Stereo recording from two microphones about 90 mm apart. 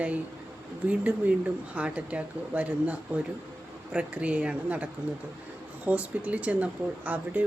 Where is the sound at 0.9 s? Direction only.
15° right (ahead or behind).